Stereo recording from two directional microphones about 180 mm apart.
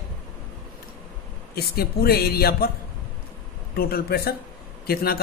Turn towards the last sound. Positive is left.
turn(degrees=60)  # may be behind; listen again after turning